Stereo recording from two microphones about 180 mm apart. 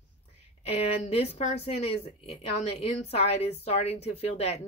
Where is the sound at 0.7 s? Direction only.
35° left (ahead or behind).